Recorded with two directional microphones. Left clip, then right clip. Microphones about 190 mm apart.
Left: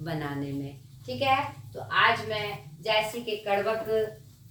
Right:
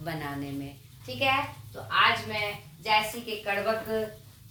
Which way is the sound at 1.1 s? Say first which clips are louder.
Left 1 dB; 10° right (ahead or behind).